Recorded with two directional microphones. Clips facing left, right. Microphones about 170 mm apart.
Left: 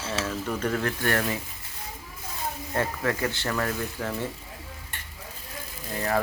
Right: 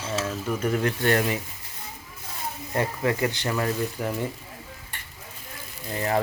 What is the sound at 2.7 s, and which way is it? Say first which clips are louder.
Speech: right 3 dB; 15° right (ahead or behind).